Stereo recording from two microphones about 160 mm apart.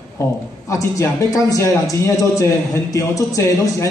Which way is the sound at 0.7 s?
20° left (ahead or behind).